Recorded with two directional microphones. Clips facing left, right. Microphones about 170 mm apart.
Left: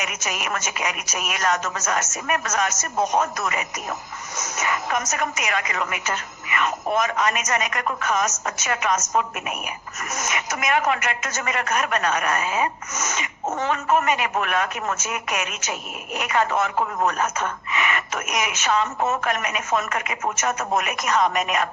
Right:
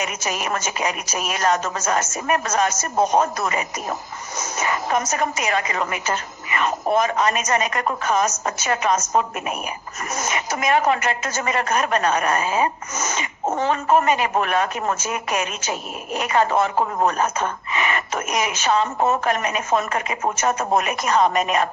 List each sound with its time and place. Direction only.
0.0 s a woman's voice: 30° right (ahead or behind)